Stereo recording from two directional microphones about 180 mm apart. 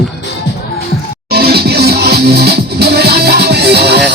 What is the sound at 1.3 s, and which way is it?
Music, 60° right (ahead or behind).